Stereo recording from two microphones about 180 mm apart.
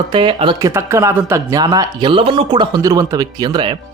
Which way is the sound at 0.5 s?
15° right (ahead or behind).